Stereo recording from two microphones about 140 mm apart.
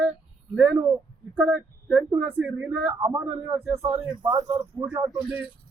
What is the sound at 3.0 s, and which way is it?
Speech, 25° right (ahead or behind).